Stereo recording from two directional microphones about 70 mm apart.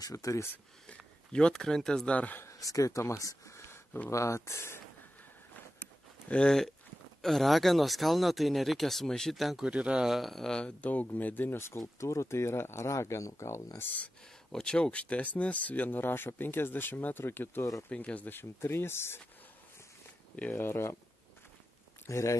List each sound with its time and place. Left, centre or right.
0.0 s speech: left
1.3 s speech: centre
2.1 s speech: left
2.4 s speech: left
6.2 s speech: centre
7.2 s speech: centre
9.7 s speech: centre
10.1 s speech: centre; by 13.7 s left
13.7 s speech: left
14.5 s speech: centre; by 17.6 s left
17.8 s speech: centre; by 19.2 s left
20.5 s speech: left
22.0 s speech: left